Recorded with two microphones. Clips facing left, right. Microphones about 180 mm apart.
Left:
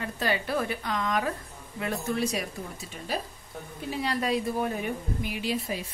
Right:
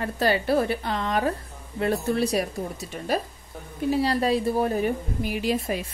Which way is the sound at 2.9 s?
50° right (ahead or behind).